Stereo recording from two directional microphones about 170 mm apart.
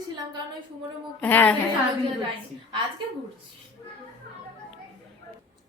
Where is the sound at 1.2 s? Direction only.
10° left (ahead or behind).